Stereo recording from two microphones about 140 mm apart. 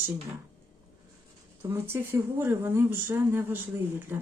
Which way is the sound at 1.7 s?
15° right (ahead or behind).